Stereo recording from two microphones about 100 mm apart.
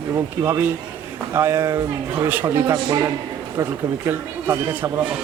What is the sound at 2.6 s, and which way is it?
Speech, 35° right (ahead or behind).